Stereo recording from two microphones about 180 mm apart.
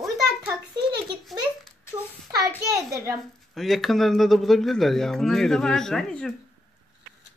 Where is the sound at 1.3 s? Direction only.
Centre (ahead or behind).